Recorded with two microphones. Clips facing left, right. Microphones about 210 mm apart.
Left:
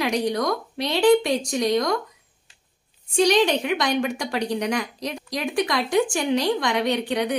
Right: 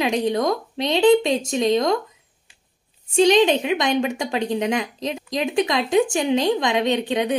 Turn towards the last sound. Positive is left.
turn(degrees=-20)  # may be behind; listen again after turning